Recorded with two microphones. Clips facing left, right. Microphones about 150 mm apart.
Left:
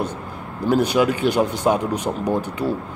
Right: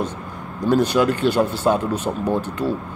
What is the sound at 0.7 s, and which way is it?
Speech, 10° left (ahead or behind).